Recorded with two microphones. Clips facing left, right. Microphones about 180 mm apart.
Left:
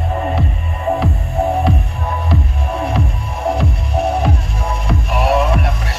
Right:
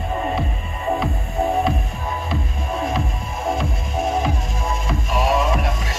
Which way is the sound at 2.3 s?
65° left (ahead or behind).